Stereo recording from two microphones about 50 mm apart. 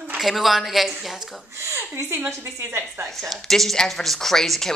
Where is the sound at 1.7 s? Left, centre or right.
Right.